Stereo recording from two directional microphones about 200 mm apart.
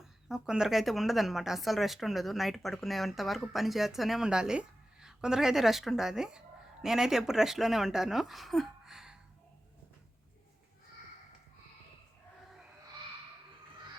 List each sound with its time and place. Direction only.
0.0 s speech: centre (ahead or behind)